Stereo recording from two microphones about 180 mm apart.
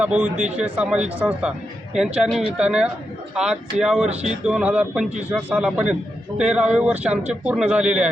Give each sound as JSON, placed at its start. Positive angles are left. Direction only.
{"t": 0.0, "sound": "a man's voice", "side_deg": -5}
{"t": 4.1, "sound": "speech", "side_deg": -35}
{"t": 4.4, "sound": "a man's voice", "side_deg": -5}